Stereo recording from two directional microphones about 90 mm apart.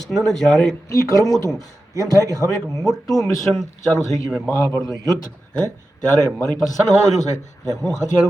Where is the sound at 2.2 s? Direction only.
35° right (ahead or behind).